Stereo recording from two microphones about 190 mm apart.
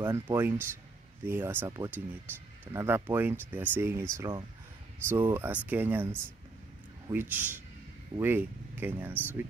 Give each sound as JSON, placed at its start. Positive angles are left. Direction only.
{"t": 0.0, "sound": "speech", "side_deg": -15}
{"t": 4.2, "sound": "speech", "side_deg": -20}
{"t": 7.1, "sound": "speech", "side_deg": -10}